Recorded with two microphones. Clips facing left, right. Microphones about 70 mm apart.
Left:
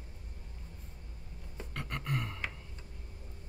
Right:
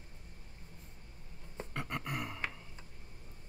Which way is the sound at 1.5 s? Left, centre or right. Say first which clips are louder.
Right 1 dB; right.